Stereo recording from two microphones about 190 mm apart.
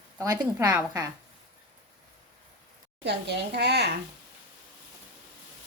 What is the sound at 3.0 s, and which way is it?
Speech, 60° right (ahead or behind).